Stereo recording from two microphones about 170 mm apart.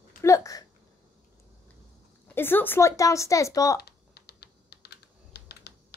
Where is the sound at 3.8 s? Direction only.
70° left (ahead or behind).